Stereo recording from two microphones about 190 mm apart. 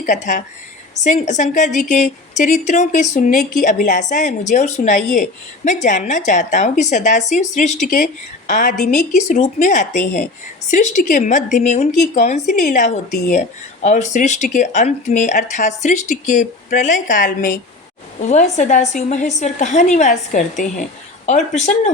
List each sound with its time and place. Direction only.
0.0 s speech: 40° left (ahead or behind)